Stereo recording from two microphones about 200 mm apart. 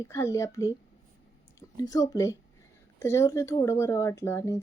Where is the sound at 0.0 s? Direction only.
15° left (ahead or behind).